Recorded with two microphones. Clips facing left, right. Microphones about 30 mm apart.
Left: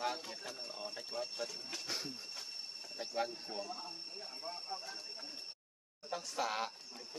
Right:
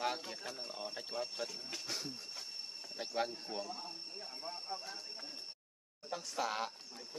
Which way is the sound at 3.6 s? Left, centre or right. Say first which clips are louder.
Even; centre.